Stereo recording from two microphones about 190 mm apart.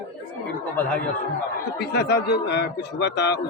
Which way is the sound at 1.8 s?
60° left (ahead or behind).